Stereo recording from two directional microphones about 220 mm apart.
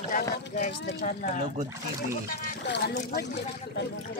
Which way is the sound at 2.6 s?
50° left (ahead or behind).